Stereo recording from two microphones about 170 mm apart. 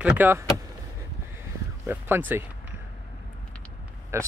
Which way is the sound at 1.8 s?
10° right (ahead or behind).